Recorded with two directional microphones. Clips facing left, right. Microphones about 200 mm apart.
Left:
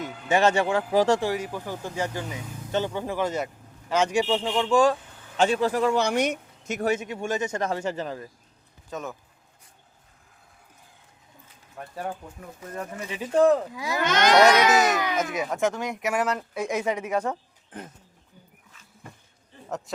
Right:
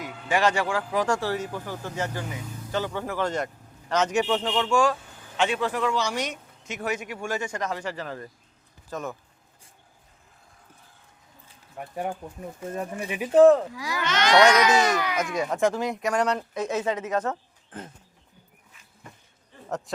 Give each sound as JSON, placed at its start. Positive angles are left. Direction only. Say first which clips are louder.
{"t": 0.0, "sound": "a man's voice", "louder": "left 2 dB", "side_deg": 25}
{"t": 5.4, "sound": "a man's voice", "louder": "left 3 dB", "side_deg": 40}
{"t": 6.0, "sound": "speech", "louder": "left 5 dB", "side_deg": 55}
{"t": 6.8, "sound": "speech", "louder": "left 4 dB", "side_deg": 25}
{"t": 8.9, "sound": "speech", "louder": "right 1 dB", "side_deg": 0}
{"t": 11.8, "sound": "speech", "louder": "right 2 dB", "side_deg": -15}
{"t": 12.6, "sound": "speech", "louder": "right 3 dB", "side_deg": -25}
{"t": 13.0, "sound": "speech", "louder": "right 4 dB", "side_deg": -15}
{"t": 14.0, "sound": "speech", "louder": "left 1 dB", "side_deg": 45}
{"t": 14.7, "sound": "speech", "louder": "left 1 dB", "side_deg": 5}
{"t": 14.9, "sound": "speech", "louder": "left 1 dB", "side_deg": 20}
{"t": 15.4, "sound": "speech", "louder": "right 2 dB", "side_deg": 0}